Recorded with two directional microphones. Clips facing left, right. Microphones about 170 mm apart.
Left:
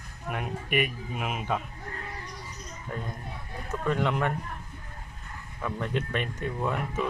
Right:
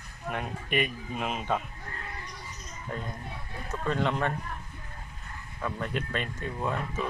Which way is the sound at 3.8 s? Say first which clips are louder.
Left 1 dB; 15° left (ahead or behind).